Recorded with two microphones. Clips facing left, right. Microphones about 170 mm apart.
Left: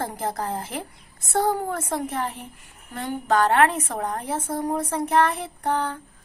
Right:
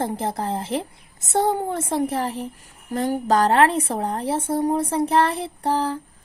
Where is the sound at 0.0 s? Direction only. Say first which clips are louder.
Right 3 dB; 25° right (ahead or behind).